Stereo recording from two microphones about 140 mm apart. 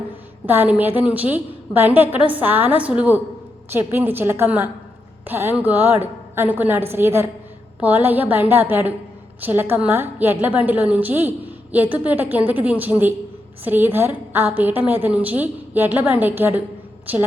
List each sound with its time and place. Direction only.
0.4 s a woman's voice: 15° right (ahead or behind)